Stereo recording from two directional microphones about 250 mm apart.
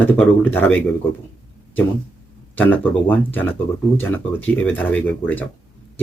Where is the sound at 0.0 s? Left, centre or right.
Centre.